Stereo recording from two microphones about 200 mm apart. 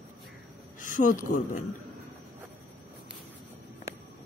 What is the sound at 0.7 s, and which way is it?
Speech, 40° left (ahead or behind).